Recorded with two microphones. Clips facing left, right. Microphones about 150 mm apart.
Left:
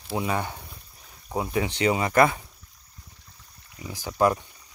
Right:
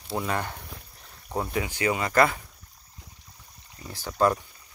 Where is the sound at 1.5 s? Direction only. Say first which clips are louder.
Left 4 dB; 25° left (ahead or behind).